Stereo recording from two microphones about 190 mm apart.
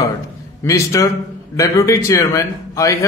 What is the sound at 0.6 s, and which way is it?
A man's voice, 15° left (ahead or behind).